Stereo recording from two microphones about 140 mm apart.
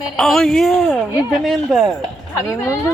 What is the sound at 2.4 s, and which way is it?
Speech, 20° left (ahead or behind).